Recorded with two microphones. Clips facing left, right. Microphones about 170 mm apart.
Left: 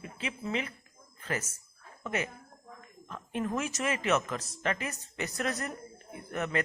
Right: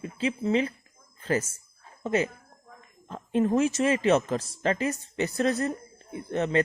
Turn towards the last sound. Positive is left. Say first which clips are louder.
# right 7 dB
turn(degrees=-30)  # may be behind; listen again after turning